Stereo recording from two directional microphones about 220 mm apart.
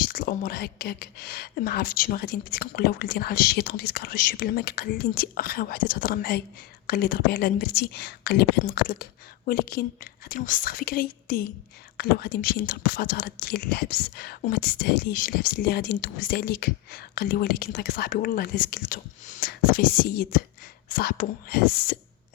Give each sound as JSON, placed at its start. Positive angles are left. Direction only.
{"t": 0.1, "sound": "speech", "side_deg": 40}